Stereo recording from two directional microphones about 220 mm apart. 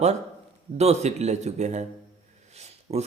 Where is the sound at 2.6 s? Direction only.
30° right (ahead or behind).